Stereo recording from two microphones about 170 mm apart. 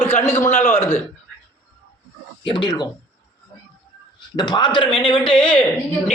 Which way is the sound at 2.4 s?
30° left (ahead or behind).